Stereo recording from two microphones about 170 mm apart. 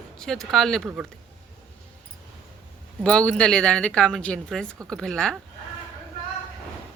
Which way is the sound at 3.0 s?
5° left (ahead or behind).